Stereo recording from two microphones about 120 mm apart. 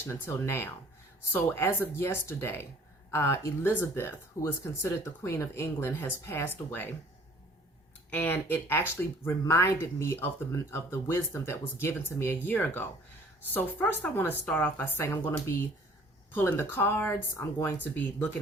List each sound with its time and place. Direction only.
0.1 s speech: 20° left (ahead or behind)
8.1 s speech: 15° left (ahead or behind)